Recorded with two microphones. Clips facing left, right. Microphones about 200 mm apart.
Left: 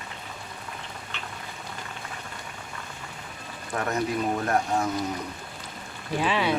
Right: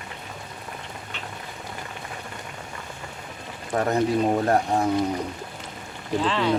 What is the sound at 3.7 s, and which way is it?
Speech, 30° right (ahead or behind).